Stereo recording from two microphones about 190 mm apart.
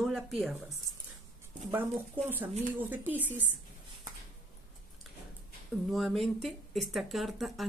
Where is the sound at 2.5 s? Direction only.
10° right (ahead or behind).